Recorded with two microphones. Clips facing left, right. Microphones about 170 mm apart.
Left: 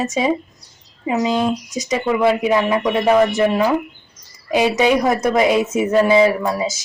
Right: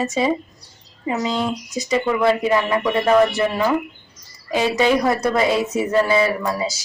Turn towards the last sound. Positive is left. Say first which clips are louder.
# left 4 dB
turn(degrees=20)  # may be behind; listen again after turning